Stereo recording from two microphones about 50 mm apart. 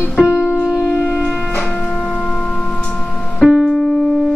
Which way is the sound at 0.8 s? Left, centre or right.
Centre.